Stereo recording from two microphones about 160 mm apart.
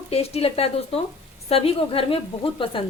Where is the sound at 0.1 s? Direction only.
40° left (ahead or behind).